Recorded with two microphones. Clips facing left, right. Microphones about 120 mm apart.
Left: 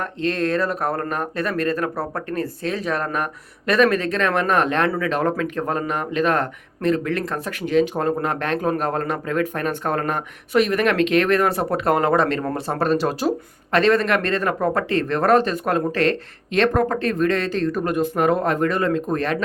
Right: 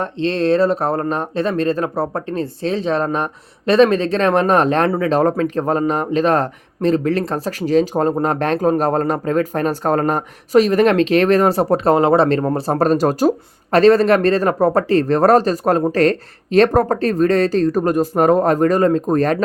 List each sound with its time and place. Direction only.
0.0 s speech: 30° right (ahead or behind)